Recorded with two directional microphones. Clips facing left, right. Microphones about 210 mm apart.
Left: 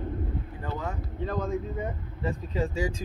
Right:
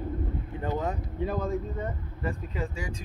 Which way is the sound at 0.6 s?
20° right (ahead or behind).